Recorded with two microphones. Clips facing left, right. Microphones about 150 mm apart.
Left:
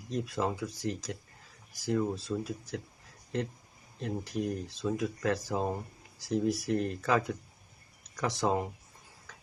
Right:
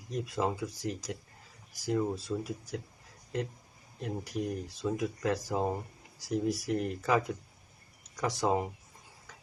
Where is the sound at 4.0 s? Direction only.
15° right (ahead or behind).